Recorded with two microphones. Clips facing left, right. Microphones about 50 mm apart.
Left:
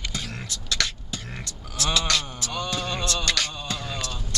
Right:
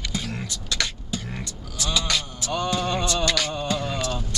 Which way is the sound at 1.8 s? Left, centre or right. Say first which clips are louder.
Left 1 dB; centre.